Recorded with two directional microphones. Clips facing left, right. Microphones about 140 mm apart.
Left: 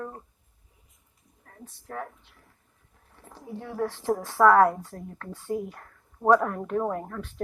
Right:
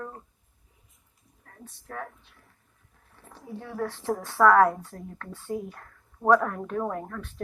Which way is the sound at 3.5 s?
25° left (ahead or behind).